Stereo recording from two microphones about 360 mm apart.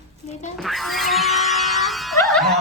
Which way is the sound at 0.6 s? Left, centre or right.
Centre.